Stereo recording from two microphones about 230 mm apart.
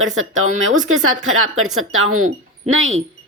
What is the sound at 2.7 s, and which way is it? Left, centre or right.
Speech, right.